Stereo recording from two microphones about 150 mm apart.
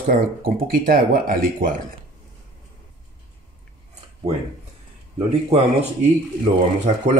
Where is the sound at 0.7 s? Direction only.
75° right (ahead or behind).